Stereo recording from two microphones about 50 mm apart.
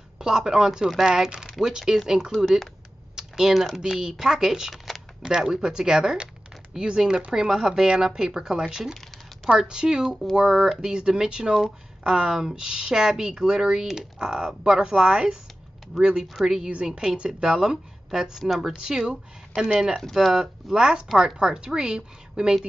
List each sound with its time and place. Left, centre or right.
0.2 s speech: centre
3.2 s typing: centre
3.5 s speech: centre
3.8 s speech: centre
5.2 s speech: centre